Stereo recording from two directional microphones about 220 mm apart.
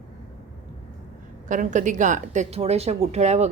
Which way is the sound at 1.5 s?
35° right (ahead or behind).